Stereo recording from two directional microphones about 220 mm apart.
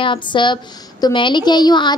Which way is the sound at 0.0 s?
20° left (ahead or behind).